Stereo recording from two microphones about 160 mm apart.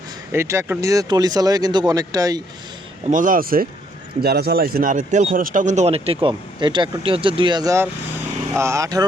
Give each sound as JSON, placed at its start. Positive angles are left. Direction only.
{"t": 0.3, "sound": "speech", "side_deg": -15}
{"t": 3.1, "sound": "speech", "side_deg": -55}
{"t": 6.1, "sound": "speech", "side_deg": -30}